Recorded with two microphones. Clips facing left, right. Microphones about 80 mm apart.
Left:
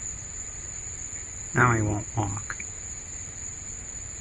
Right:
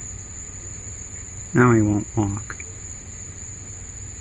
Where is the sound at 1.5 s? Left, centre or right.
Centre.